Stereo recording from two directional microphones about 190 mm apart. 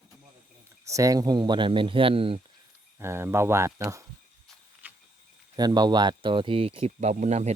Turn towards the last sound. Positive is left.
turn(degrees=-40)  # may be behind; listen again after turning